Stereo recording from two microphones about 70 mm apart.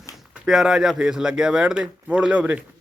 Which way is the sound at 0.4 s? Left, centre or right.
Centre.